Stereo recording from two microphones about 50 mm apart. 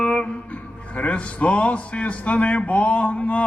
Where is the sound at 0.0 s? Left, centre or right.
Left.